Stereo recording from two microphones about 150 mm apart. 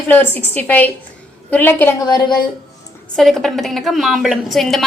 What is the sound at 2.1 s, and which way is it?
Speech, 25° left (ahead or behind).